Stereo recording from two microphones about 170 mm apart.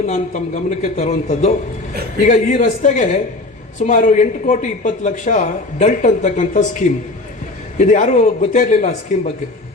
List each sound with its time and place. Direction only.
0.1 s a man's voice: 45° left (ahead or behind)